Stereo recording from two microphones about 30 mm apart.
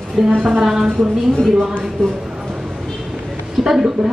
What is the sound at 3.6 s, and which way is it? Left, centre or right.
Speech, centre.